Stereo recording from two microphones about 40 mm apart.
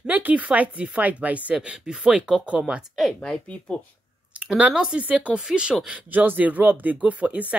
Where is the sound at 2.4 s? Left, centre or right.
Right.